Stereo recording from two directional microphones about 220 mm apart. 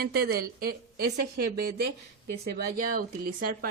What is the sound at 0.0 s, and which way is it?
A woman's voice, 45° right (ahead or behind).